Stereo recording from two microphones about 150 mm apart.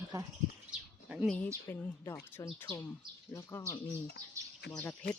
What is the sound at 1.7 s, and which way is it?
Speech, 10° left (ahead or behind).